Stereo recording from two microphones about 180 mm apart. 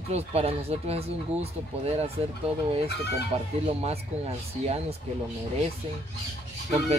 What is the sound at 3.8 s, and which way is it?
Speech, 35° right (ahead or behind).